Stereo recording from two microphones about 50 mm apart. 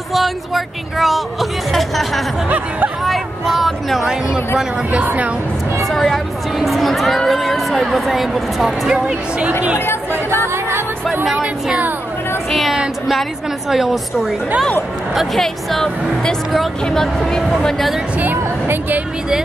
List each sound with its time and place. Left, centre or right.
0.1 s speech: centre
5.0 s speech: right
5.9 s speech: centre
8.8 s speech: right
10.4 s music: right
11.2 s a woman's voice: centre
12.4 s a woman's voice: centre
15.1 s speech: centre
18.2 s speech: right